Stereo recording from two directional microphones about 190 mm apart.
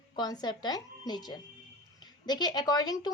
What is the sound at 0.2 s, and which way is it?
A woman's voice, 20° left (ahead or behind).